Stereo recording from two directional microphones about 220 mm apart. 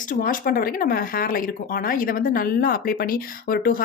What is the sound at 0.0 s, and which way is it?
Speech, 35° left (ahead or behind).